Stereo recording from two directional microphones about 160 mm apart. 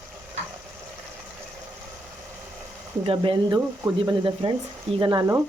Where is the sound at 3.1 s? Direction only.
35° right (ahead or behind).